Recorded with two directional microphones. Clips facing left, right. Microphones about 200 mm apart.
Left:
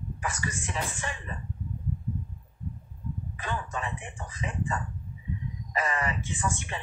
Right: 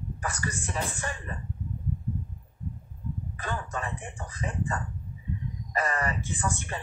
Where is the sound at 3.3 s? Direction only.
40° right (ahead or behind).